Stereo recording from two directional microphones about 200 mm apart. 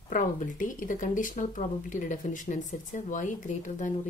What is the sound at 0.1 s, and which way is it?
Speech, 40° left (ahead or behind).